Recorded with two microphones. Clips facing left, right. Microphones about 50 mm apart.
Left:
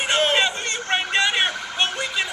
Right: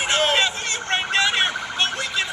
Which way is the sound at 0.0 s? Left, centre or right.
Centre.